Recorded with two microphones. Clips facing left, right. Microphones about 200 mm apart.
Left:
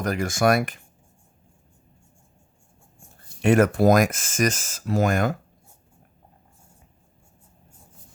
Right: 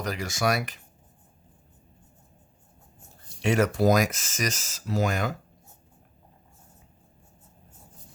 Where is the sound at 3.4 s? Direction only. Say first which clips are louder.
Left 5 dB; 50° left (ahead or behind).